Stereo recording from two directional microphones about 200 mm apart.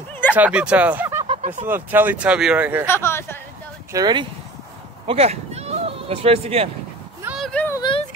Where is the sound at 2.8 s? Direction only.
10° left (ahead or behind).